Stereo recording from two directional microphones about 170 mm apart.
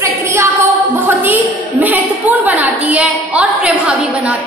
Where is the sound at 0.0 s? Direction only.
15° right (ahead or behind).